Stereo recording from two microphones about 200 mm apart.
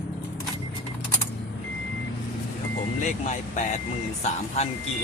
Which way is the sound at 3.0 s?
35° left (ahead or behind).